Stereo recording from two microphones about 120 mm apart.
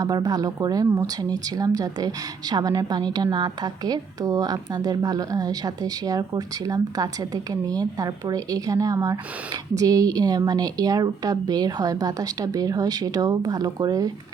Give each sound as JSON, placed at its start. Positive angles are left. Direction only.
{"t": 0.0, "sound": "a woman's voice", "side_deg": -30}